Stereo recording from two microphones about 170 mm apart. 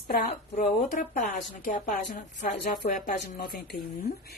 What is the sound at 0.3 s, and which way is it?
Speech, 40° left (ahead or behind).